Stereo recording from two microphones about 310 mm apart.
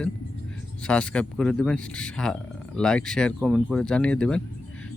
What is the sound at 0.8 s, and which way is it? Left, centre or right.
Speech, centre.